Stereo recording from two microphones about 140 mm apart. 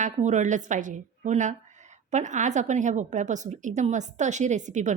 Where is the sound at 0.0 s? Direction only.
60° right (ahead or behind).